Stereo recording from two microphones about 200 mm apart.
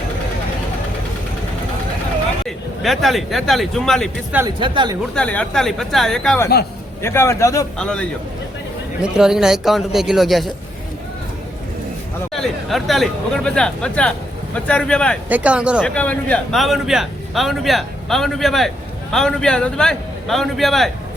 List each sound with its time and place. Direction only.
2.8 s a man's voice: centre (ahead or behind)
4.4 s speech: 20° right (ahead or behind)
5.1 s a man's voice: 5° left (ahead or behind)
7.8 s a man's voice: 5° left (ahead or behind)
9.1 s a man's voice: 5° right (ahead or behind)
12.3 s a man's voice: centre (ahead or behind)
15.3 s a man's voice: 5° right (ahead or behind)
15.8 s a man's voice: 5° left (ahead or behind)